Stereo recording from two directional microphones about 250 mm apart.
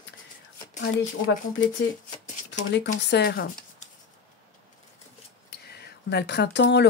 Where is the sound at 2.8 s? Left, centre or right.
Left.